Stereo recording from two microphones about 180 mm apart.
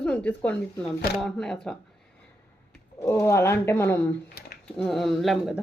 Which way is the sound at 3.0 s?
15° left (ahead or behind).